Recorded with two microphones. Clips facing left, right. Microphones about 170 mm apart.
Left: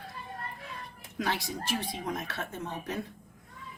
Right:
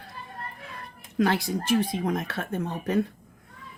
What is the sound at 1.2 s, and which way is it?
Speech, 55° right (ahead or behind).